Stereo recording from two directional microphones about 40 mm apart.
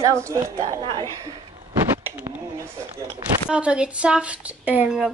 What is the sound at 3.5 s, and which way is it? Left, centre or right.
Speech, right.